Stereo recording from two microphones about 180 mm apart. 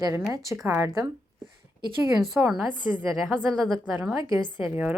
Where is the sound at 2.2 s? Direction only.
5° right (ahead or behind).